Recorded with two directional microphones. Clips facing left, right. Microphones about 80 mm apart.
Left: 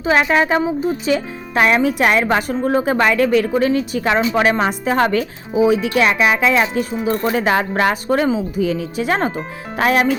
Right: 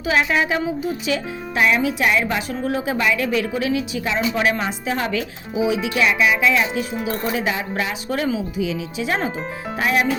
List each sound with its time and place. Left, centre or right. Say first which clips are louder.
0.0 s a woman's voice: left 4 dB; left
1.5 s speech: left 4 dB; left
2.6 s a woman's voice: left 5 dB; left
7.8 s speech: left 8 dB; left
8.1 s speech: left 5 dB; left
9.7 s speech: left 4 dB; left